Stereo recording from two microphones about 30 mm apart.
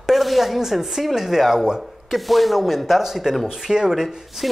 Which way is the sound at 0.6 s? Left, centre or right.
Centre.